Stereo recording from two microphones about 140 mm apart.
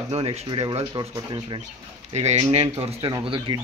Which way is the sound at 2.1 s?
50° right (ahead or behind).